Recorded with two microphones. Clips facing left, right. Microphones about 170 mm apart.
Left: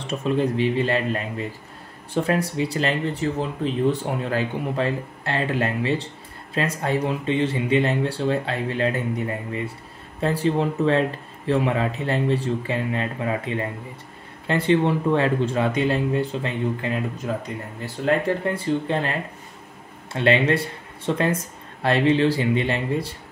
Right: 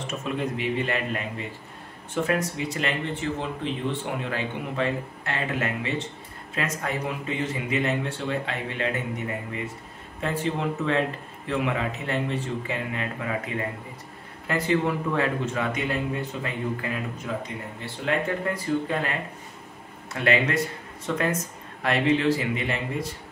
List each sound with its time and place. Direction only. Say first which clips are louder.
0.0 s speech: left 6 dB; 30° left (ahead or behind)
10.2 s speech: left 5 dB; 35° left (ahead or behind)
17.3 s speech: left 3 dB; 40° left (ahead or behind)
18.5 s speech: left 3 dB; 30° left (ahead or behind)